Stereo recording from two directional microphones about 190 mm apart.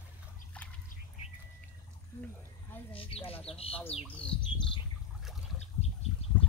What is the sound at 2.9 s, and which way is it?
Bird, 30° left (ahead or behind).